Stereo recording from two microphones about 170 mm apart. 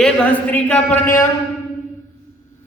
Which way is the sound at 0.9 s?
50° left (ahead or behind).